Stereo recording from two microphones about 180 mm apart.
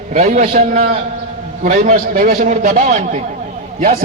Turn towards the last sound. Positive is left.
turn(degrees=-40)  # may be behind; listen again after turning